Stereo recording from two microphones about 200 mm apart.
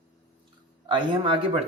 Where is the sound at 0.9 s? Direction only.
25° right (ahead or behind).